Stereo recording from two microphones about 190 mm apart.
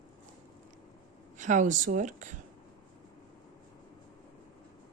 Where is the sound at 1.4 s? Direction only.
40° right (ahead or behind).